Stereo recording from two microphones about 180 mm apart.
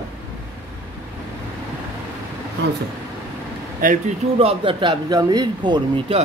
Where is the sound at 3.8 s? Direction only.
50° right (ahead or behind).